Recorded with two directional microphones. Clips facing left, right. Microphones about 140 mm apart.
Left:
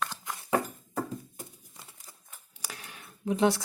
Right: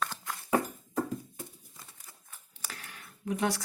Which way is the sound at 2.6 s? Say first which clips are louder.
Left 2 dB; 15° left (ahead or behind).